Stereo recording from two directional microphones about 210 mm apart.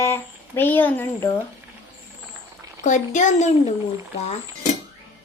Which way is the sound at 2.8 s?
35° left (ahead or behind).